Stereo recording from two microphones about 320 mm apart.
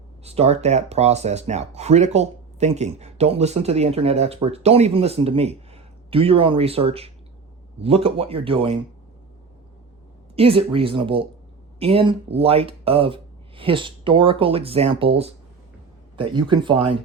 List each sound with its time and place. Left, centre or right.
0.3 s speech: centre
10.3 s speech: centre